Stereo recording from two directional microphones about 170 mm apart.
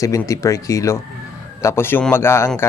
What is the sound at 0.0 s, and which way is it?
Speech, 20° left (ahead or behind).